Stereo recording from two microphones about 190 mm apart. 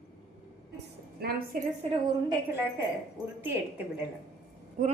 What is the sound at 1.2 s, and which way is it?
Speech, 55° right (ahead or behind).